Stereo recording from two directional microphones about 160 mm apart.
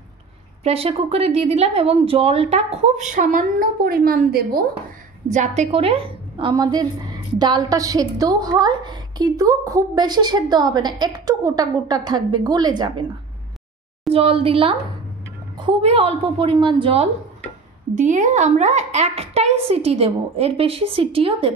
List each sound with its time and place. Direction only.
0.7 s speech: 35° right (ahead or behind); by 4.6 s 70° right (ahead or behind)
5.3 s a woman's voice: 45° right (ahead or behind); by 13.0 s 25° right (ahead or behind)
14.1 s speech: 35° right (ahead or behind)
15.8 s speech: 40° right (ahead or behind)
17.9 s speech: 50° right (ahead or behind); by 21.5 s 35° right (ahead or behind)